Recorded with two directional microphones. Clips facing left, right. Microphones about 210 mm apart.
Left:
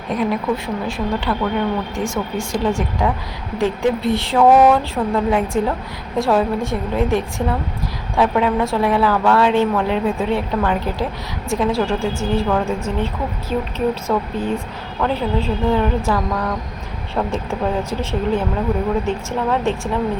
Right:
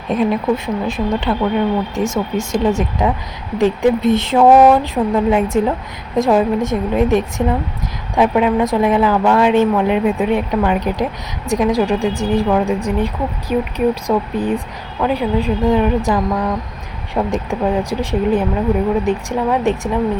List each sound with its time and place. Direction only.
0.2 s a woman's voice: 20° right (ahead or behind)